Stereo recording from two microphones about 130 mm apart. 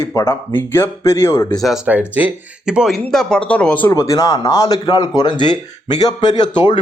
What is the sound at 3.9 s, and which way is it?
Speech, 25° left (ahead or behind).